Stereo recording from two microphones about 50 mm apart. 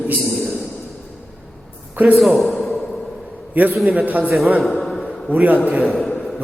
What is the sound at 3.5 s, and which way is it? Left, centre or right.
Speech, right.